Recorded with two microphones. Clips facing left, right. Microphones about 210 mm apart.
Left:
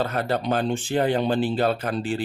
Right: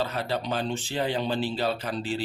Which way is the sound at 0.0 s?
50° left (ahead or behind).